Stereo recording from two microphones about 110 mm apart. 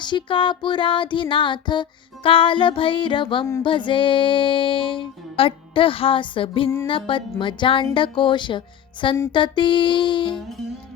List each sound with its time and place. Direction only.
0.0 s music: 45° left (ahead or behind)